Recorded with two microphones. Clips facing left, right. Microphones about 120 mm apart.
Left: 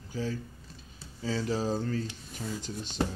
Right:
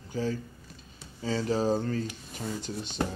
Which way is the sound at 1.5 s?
45° right (ahead or behind).